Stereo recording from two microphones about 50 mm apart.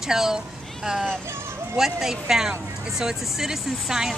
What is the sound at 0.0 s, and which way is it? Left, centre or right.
Speech, centre.